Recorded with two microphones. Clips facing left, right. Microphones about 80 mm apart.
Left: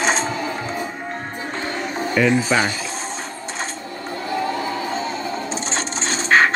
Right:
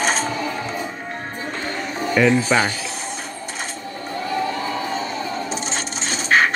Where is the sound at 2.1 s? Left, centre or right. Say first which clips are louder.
Right 1 dB; centre.